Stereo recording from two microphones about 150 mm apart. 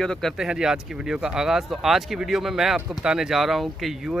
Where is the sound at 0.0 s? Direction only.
5° left (ahead or behind).